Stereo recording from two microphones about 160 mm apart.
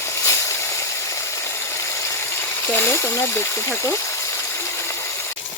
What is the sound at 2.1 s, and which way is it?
Speech, 15° left (ahead or behind).